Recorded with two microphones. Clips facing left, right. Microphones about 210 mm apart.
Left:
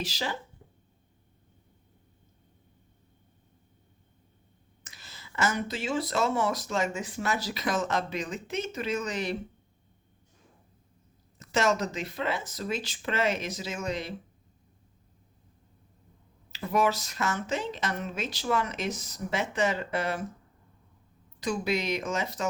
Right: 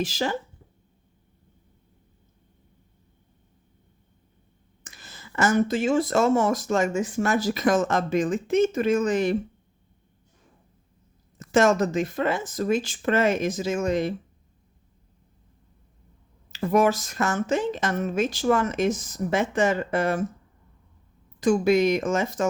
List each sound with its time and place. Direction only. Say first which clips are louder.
0.0 s speech: right 7 dB; 50° right (ahead or behind)
4.8 s speech: right 5 dB; 50° right (ahead or behind)
11.3 s speech: right 7 dB; 50° right (ahead or behind)
16.5 s speech: right 6 dB; 50° right (ahead or behind)
21.4 s speech: right 10 dB; 50° right (ahead or behind)